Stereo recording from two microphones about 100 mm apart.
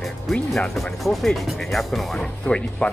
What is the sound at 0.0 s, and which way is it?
Speech, 5° left (ahead or behind).